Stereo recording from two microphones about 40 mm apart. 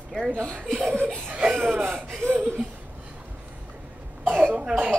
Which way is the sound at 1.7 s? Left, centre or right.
Right.